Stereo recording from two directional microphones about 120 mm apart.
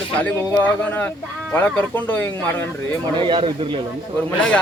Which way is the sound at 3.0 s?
45° right (ahead or behind).